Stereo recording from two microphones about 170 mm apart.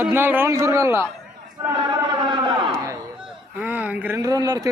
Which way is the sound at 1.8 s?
25° right (ahead or behind).